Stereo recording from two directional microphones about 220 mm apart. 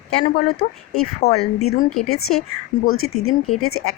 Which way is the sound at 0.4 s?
75° left (ahead or behind).